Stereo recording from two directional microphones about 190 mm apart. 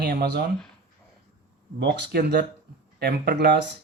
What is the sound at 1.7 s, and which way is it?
Speech, 60° right (ahead or behind).